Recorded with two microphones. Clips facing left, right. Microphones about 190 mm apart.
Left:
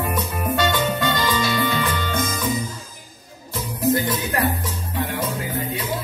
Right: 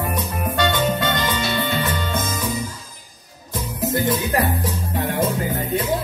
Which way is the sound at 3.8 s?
25° right (ahead or behind).